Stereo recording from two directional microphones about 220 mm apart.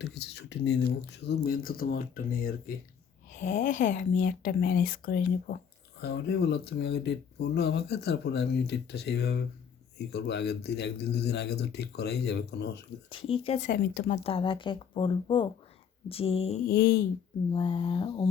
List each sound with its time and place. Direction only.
0.0 s speech: 50° left (ahead or behind)
13.1 s speech: 25° left (ahead or behind)
13.7 s speech: 45° left (ahead or behind)
14.3 s speech: 25° left (ahead or behind)
16.6 s speech: 45° left (ahead or behind)
17.5 s speech: 20° left (ahead or behind)